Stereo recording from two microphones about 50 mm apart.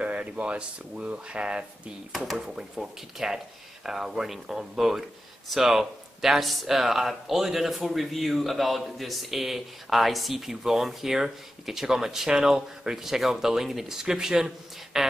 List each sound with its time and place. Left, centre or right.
0.0 s speech: right; by 15.0 s centre